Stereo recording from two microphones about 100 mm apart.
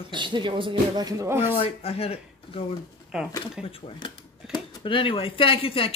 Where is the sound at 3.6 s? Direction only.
65° left (ahead or behind).